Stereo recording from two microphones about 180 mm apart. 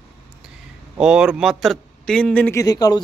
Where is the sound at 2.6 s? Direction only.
20° left (ahead or behind).